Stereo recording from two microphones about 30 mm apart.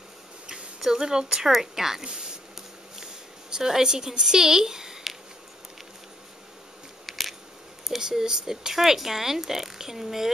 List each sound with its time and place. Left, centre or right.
0.7 s speech: centre
3.4 s speech: centre
7.1 s a sound: centre
8.0 s speech: centre